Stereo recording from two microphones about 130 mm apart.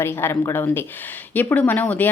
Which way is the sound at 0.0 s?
20° left (ahead or behind).